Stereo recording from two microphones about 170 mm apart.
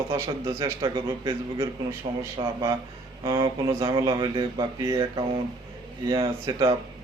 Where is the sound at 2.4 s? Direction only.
30° right (ahead or behind).